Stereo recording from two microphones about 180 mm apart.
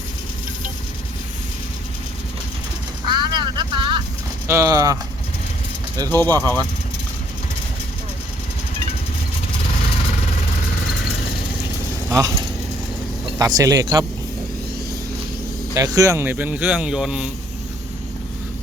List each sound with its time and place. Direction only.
3.1 s vehicle: 25° right (ahead or behind)
4.4 s speech: 15° right (ahead or behind)
6.1 s speech: 20° right (ahead or behind)
12.1 s speech: 15° right (ahead or behind)
13.4 s speech: 20° right (ahead or behind)
15.7 s speech: 20° right (ahead or behind); by 17.3 s 5° right (ahead or behind)